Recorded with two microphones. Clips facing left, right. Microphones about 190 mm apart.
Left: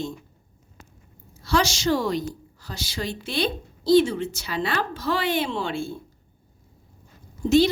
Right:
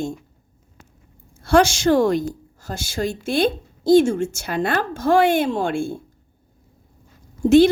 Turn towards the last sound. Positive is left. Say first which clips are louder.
# right 6 dB
turn(degrees=-55)  # may be behind; listen again after turning